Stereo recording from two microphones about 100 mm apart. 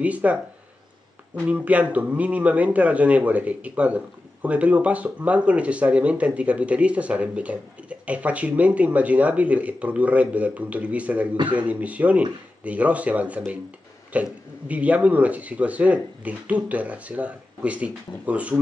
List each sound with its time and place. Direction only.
0.0 s speech: 15° right (ahead or behind)